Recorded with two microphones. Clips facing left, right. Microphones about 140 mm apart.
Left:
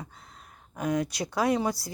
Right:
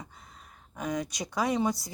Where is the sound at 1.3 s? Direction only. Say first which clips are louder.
Left 1 dB; 10° left (ahead or behind).